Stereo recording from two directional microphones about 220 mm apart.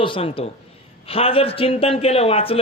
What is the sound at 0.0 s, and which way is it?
A man's voice, 25° left (ahead or behind).